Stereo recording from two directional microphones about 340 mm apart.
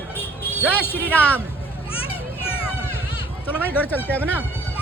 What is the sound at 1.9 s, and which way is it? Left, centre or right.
Children playing, centre.